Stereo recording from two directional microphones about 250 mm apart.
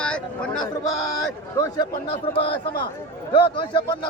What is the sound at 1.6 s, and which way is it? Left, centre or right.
Speech, centre.